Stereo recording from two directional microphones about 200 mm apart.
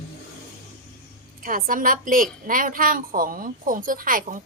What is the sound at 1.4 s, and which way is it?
Speech, 45° right (ahead or behind).